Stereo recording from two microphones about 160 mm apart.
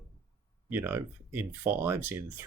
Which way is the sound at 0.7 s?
15° right (ahead or behind).